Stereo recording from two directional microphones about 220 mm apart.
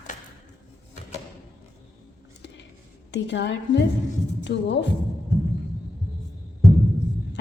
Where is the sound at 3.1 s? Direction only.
55° left (ahead or behind).